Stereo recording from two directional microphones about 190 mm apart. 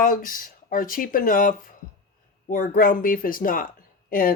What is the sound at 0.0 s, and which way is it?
Speech, 45° left (ahead or behind).